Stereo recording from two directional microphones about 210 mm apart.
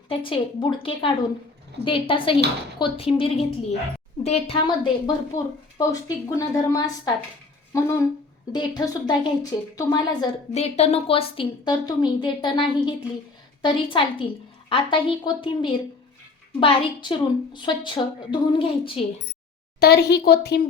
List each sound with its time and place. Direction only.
0.3 s a woman's voice: 25° left (ahead or behind)
10.5 s a woman's voice: 30° left (ahead or behind)
19.8 s speech: 50° left (ahead or behind)